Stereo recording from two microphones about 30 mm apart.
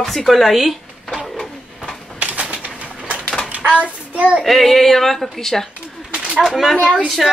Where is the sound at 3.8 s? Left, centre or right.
Right.